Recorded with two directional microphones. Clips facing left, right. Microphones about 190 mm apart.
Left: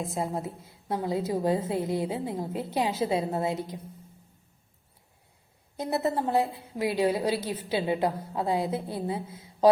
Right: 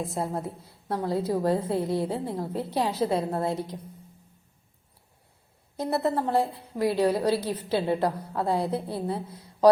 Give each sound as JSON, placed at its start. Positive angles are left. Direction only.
{"t": 0.1, "sound": "a woman's voice", "side_deg": 0}
{"t": 2.7, "sound": "a woman's voice", "side_deg": 25}
{"t": 3.4, "sound": "a woman's voice", "side_deg": 5}
{"t": 5.7, "sound": "a woman's voice", "side_deg": 0}